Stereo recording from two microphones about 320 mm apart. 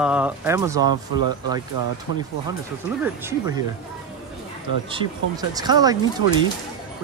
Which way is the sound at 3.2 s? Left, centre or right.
Centre.